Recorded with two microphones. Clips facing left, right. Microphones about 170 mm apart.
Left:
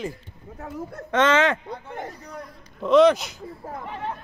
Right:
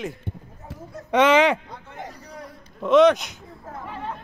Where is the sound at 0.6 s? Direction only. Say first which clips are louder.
Left 7 dB; 60° left (ahead or behind).